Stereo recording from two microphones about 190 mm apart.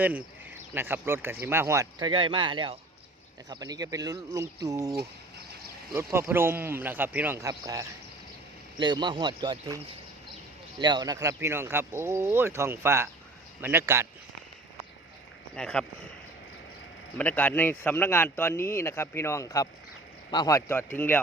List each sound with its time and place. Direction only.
0.0 s speech: 10° right (ahead or behind)
15.5 s speech: 5° left (ahead or behind)
17.2 s speech: 10° left (ahead or behind)